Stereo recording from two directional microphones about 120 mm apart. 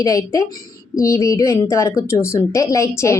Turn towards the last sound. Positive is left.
turn(degrees=25)  # may be behind; listen again after turning